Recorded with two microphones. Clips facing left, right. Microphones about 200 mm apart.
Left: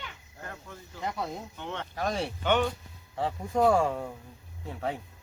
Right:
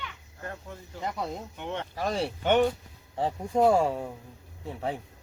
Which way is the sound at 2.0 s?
5° right (ahead or behind).